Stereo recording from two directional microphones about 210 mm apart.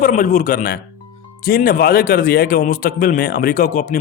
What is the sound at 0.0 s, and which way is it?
Speech, 40° left (ahead or behind).